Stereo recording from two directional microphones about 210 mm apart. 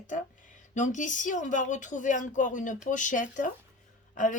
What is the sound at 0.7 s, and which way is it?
Speech, 35° left (ahead or behind).